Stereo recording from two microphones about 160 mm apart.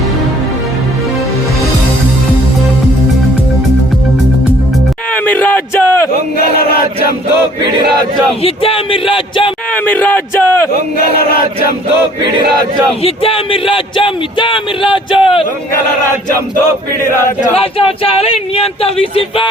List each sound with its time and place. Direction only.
5.1 s a sound: 10° left (ahead or behind)
6.3 s chant: 70° left (ahead or behind)
8.4 s speech: 35° left (ahead or behind)
9.7 s a man's voice: 10° left (ahead or behind)
10.9 s chant: 75° left (ahead or behind)
13.0 s speech: 35° left (ahead or behind)
17.2 s a man's voice: 15° left (ahead or behind)
17.5 s speech: 35° left (ahead or behind)